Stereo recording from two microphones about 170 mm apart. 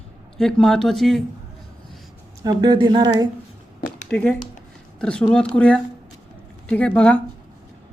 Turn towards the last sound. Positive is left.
turn(degrees=5)  # may be behind; listen again after turning